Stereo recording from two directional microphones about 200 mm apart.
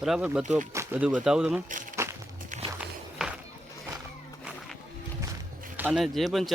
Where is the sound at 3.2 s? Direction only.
5° right (ahead or behind).